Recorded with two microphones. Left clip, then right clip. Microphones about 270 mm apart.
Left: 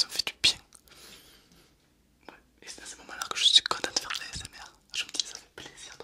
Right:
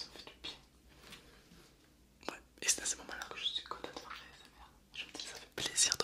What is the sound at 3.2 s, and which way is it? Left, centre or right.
Whispering, left.